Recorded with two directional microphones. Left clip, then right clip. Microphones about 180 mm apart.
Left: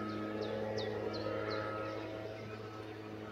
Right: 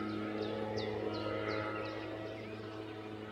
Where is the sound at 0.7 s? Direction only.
5° right (ahead or behind).